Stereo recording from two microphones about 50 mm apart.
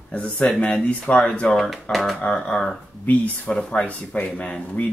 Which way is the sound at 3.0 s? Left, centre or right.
Left.